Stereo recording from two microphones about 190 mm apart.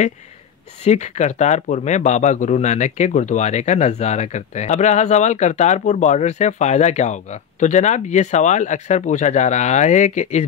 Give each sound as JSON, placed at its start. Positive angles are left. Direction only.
{"t": 0.8, "sound": "speech", "side_deg": 40}